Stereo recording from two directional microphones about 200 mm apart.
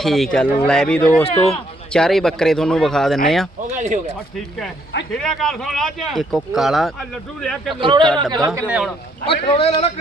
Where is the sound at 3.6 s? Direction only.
40° right (ahead or behind).